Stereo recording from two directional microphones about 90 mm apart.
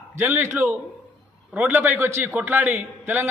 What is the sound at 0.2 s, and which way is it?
A man's voice, 25° right (ahead or behind).